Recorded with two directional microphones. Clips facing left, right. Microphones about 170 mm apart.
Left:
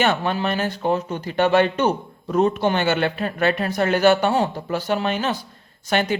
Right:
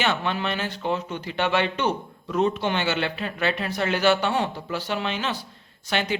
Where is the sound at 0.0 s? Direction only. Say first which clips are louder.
Left 5 dB; 45° left (ahead or behind).